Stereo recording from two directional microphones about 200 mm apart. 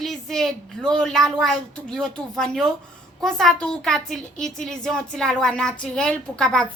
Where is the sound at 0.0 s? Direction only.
Centre (ahead or behind).